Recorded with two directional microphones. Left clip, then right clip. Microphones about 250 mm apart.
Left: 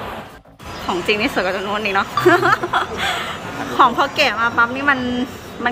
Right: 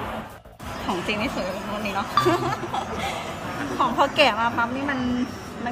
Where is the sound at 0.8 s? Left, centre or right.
Centre.